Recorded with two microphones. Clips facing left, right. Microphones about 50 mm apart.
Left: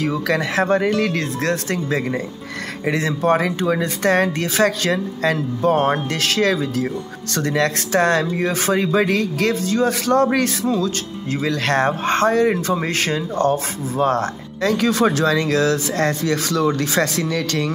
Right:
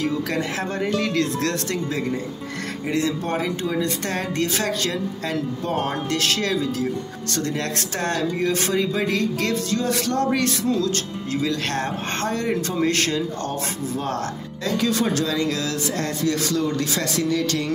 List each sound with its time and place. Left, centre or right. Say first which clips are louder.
0.0 s speech: left 4 dB; left
2.9 s speech: left 6 dB; left
3.3 s speech: left 5 dB; left
3.8 s speech: left 8 dB; left
8.3 s speech: left 3 dB; left
11.4 s speech: left 8 dB; left
13.5 s speech: left 6 dB; left